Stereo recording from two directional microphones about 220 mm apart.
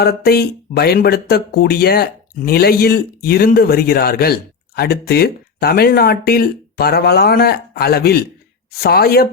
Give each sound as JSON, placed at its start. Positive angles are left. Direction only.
{"t": 0.0, "sound": "speech", "side_deg": 45}